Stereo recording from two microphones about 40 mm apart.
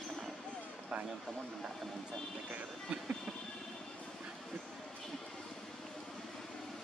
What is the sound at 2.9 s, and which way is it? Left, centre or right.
Train, right.